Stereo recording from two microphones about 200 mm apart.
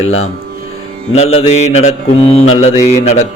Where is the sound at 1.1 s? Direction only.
30° left (ahead or behind).